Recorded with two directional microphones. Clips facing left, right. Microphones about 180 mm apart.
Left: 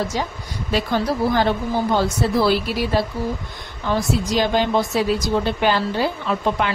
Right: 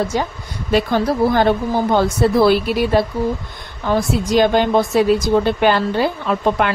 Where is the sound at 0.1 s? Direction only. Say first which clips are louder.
Right 4 dB; 55° right (ahead or behind).